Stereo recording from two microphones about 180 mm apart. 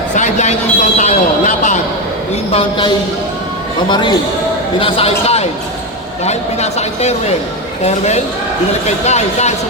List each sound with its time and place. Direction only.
0.2 s a man's voice: 40° left (ahead or behind)
2.5 s a woman's voice: 30° left (ahead or behind)